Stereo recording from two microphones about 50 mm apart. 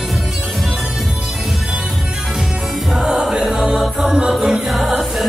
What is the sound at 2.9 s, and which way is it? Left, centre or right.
Music, centre.